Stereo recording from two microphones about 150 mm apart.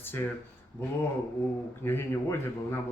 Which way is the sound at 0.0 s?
15° left (ahead or behind).